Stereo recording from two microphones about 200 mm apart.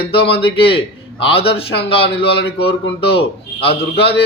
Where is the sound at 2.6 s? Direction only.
25° left (ahead or behind).